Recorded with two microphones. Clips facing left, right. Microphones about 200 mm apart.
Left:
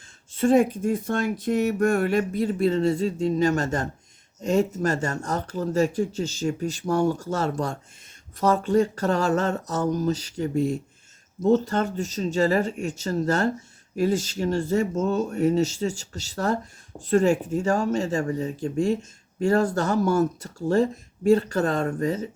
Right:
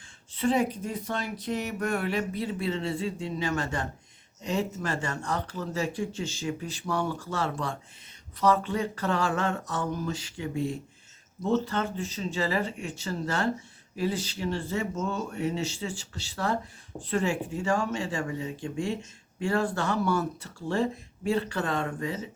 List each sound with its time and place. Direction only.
0.3 s speech: 45° left (ahead or behind)